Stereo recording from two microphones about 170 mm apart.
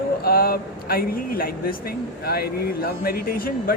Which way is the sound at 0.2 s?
60° left (ahead or behind).